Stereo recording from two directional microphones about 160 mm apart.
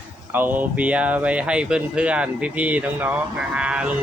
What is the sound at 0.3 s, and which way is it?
Speech, 10° right (ahead or behind).